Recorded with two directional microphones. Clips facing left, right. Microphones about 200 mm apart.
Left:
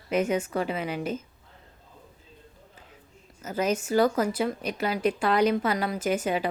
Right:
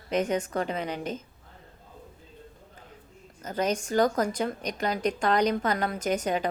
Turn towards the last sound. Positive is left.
turn(degrees=5)  # may be behind; listen again after turning